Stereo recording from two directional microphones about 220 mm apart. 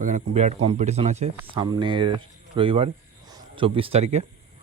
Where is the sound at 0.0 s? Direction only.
35° right (ahead or behind).